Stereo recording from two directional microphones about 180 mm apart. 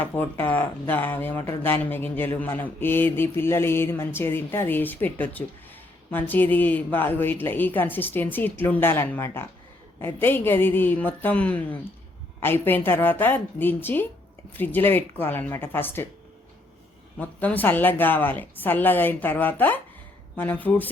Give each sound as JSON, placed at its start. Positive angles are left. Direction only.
{"t": 0.0, "sound": "speech", "side_deg": 10}
{"t": 17.2, "sound": "speech", "side_deg": 10}